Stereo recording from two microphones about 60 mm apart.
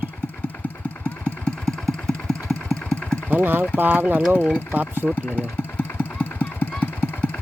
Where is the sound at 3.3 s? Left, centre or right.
Right.